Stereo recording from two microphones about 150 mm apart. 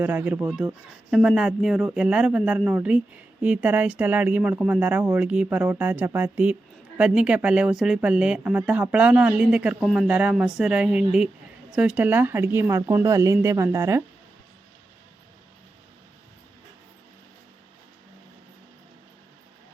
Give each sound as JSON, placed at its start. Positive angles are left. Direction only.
{"t": 0.0, "sound": "speech", "side_deg": -10}